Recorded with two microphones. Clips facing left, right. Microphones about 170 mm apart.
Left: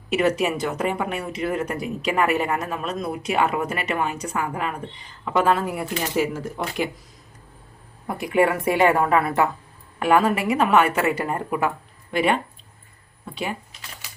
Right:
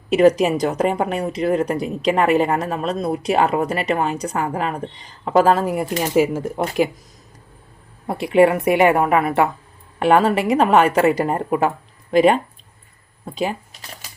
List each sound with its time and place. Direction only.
0.1 s a woman's voice: 35° right (ahead or behind)
8.0 s a woman's voice: 25° right (ahead or behind)